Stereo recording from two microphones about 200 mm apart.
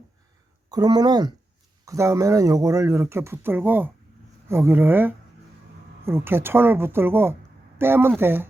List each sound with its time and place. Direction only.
0.7 s speech: 20° right (ahead or behind)